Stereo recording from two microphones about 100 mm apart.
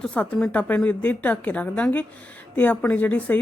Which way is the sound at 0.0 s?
10° left (ahead or behind).